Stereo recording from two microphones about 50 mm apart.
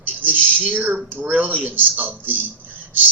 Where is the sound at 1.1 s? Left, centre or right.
Right.